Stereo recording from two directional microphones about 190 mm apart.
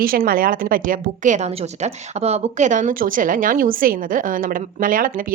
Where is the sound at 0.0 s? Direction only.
50° right (ahead or behind).